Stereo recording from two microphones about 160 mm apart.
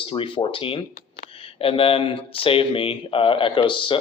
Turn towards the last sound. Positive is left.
turn(degrees=30)  # may be behind; listen again after turning